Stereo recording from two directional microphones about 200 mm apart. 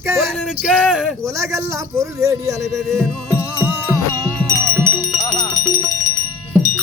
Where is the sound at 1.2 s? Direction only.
15° right (ahead or behind).